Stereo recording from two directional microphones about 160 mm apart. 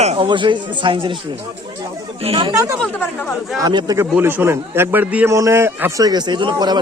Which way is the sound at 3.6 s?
25° right (ahead or behind).